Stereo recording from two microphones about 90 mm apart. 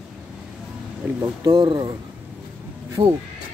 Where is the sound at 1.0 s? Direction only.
15° right (ahead or behind).